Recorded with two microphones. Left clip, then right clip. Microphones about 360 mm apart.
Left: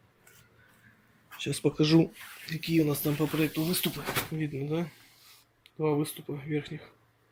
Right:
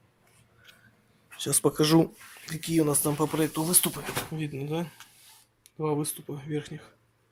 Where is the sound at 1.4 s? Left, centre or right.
Centre.